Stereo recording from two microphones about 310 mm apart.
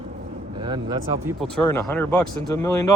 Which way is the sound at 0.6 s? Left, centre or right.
Centre.